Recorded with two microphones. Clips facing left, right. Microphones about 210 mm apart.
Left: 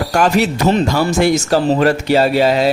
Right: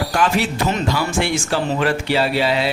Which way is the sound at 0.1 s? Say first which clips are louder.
Left 7 dB; 45° left (ahead or behind).